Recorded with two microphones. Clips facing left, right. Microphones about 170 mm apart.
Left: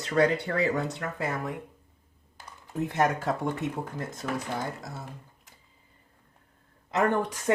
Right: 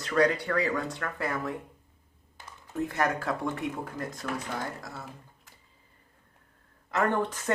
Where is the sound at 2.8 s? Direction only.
20° left (ahead or behind).